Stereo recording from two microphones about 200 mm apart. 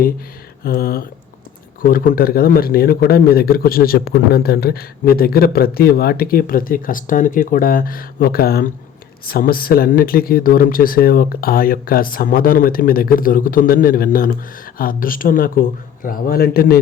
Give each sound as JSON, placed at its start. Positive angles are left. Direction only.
{"t": 0.6, "sound": "speech", "side_deg": 50}